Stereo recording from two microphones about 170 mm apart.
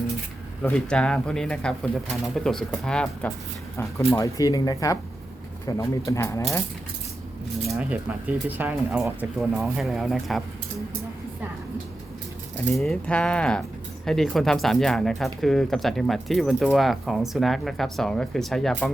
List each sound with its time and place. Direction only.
0.6 s speech: 5° left (ahead or behind)
7.7 s speech: 5° right (ahead or behind)
12.7 s speech: centre (ahead or behind)